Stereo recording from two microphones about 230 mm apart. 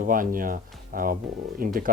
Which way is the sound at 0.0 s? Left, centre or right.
Right.